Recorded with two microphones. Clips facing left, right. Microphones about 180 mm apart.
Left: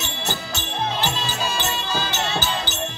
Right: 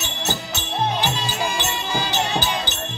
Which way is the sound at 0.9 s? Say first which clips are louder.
Right 1 dB; 15° right (ahead or behind).